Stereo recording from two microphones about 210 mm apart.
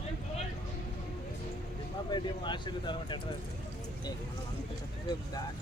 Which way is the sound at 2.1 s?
20° left (ahead or behind).